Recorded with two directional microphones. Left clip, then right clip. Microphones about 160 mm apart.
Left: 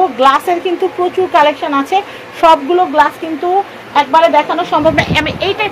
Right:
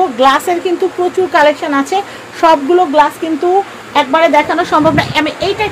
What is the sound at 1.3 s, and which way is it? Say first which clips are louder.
A woman's voice: even; 55° right (ahead or behind).